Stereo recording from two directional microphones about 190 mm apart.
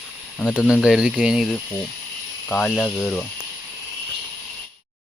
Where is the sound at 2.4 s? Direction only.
10° left (ahead or behind).